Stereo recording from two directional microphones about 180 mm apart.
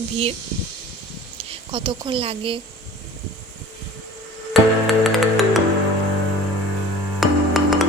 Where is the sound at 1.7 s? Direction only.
25° right (ahead or behind).